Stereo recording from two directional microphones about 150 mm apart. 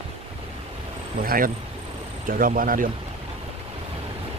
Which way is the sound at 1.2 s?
70° right (ahead or behind).